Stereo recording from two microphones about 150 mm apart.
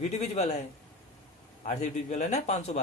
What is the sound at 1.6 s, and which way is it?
A man's voice, 55° left (ahead or behind).